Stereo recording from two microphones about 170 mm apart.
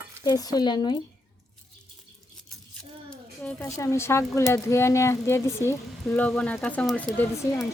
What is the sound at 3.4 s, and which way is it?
Speech, 15° left (ahead or behind).